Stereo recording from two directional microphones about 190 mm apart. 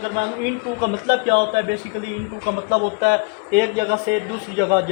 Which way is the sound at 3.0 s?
55° right (ahead or behind).